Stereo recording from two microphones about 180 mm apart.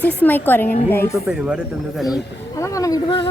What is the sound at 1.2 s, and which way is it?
Speech, 5° right (ahead or behind).